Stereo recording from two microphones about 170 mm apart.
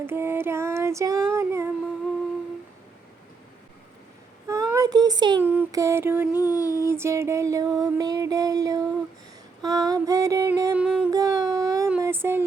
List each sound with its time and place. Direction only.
0.0 s child singing: 15° right (ahead or behind)
4.4 s child singing: 20° right (ahead or behind)
5.4 s mantra: 10° right (ahead or behind)
6.4 s a sound: 20° left (ahead or behind)
6.8 s music: 15° right (ahead or behind)
9.6 s a sound: 20° right (ahead or behind)
10.8 s music: 5° right (ahead or behind)
11.1 s a sound: 20° right (ahead or behind)
11.9 s music: 15° right (ahead or behind)